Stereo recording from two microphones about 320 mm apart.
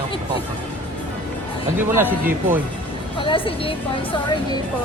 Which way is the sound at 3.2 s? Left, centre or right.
Centre.